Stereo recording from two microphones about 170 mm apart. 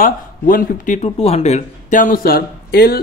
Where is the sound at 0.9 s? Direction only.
35° left (ahead or behind).